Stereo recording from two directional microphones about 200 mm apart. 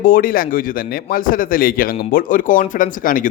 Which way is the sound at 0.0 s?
45° left (ahead or behind).